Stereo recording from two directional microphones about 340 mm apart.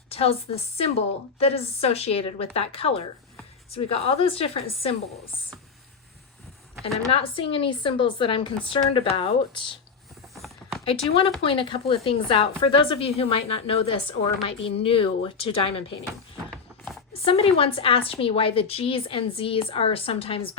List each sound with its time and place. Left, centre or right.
0.1 s a woman's voice: centre
6.8 s a woman's voice: centre
10.3 s a sound: centre
10.8 s a woman's voice: centre
16.5 s a sound: centre
17.1 s a woman's voice: centre